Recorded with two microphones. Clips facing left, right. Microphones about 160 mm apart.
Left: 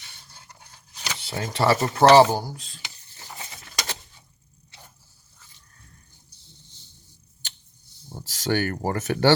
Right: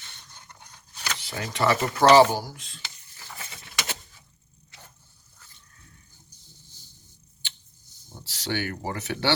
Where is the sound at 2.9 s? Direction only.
30° left (ahead or behind).